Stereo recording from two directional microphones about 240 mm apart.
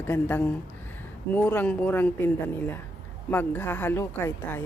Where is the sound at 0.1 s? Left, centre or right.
Centre.